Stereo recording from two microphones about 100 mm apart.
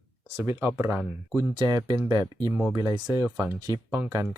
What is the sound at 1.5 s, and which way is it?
Speech, 40° right (ahead or behind).